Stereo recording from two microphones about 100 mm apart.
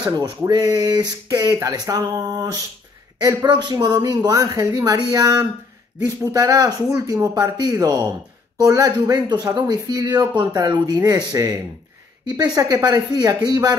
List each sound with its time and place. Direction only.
0.5 s speech: 45° right (ahead or behind)